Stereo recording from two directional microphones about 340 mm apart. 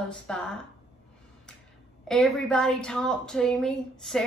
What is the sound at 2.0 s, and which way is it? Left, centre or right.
A woman's voice, centre.